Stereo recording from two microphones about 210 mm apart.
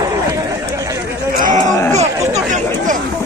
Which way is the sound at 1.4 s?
35° right (ahead or behind).